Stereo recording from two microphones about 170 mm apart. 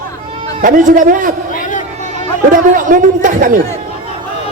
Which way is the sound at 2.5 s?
50° right (ahead or behind).